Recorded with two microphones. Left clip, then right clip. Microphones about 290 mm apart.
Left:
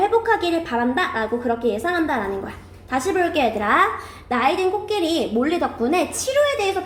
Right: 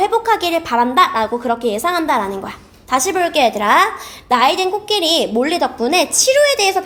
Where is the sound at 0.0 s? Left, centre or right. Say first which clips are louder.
Right 3 dB; right.